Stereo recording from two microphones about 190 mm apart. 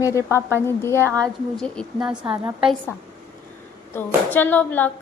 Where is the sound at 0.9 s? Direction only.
15° right (ahead or behind).